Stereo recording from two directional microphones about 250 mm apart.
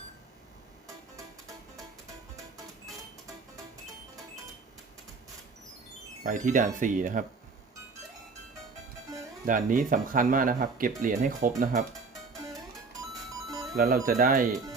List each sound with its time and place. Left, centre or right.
6.2 s speech: right
9.5 s speech: right
13.7 s speech: right